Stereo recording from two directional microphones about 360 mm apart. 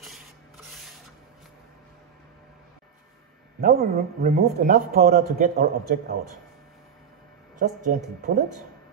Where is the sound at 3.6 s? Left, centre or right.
Right.